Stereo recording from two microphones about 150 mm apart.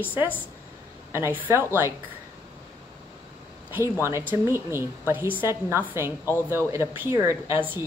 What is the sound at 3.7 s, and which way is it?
A woman's voice, 15° right (ahead or behind).